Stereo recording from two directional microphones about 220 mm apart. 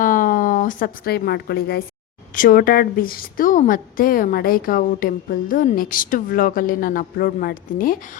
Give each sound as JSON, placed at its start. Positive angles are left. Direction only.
{"t": 0.0, "sound": "a woman's voice", "side_deg": 40}